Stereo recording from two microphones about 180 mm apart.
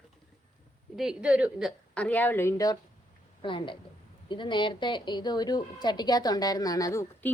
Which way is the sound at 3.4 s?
25° left (ahead or behind).